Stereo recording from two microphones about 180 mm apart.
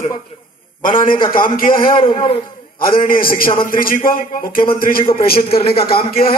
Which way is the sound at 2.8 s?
50° left (ahead or behind).